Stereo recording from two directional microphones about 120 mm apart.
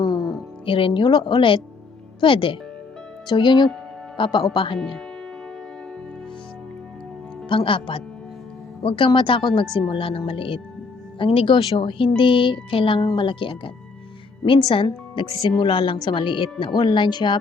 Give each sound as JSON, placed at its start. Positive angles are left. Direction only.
{"t": 0.0, "sound": "music", "side_deg": 35}
{"t": 0.6, "sound": "speech", "side_deg": 45}
{"t": 7.4, "sound": "speech", "side_deg": 45}